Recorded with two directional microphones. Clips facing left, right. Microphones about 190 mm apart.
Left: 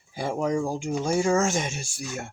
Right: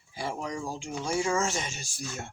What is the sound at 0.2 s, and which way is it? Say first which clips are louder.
Speech: left 8 dB; 50° left (ahead or behind).